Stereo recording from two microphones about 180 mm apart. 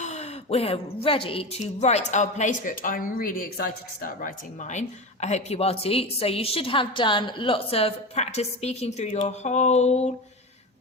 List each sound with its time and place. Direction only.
0.0 s a woman's voice: 40° left (ahead or behind)